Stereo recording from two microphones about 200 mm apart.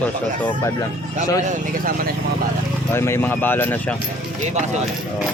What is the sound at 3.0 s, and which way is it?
Speech, 10° left (ahead or behind).